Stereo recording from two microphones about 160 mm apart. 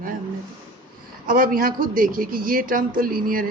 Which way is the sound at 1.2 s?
60° right (ahead or behind).